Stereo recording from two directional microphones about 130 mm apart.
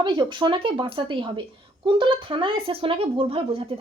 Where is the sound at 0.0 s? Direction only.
35° right (ahead or behind).